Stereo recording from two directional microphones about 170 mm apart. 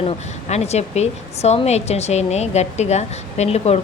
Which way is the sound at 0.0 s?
40° left (ahead or behind).